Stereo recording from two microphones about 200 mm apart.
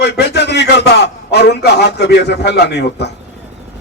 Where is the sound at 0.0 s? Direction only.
55° left (ahead or behind).